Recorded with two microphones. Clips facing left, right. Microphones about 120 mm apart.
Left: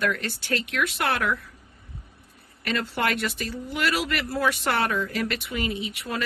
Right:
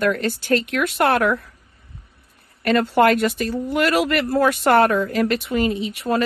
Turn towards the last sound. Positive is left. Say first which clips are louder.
# right 9 dB
turn(degrees=-40)  # may be behind; listen again after turning